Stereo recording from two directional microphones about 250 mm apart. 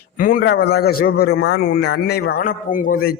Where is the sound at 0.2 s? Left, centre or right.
Left.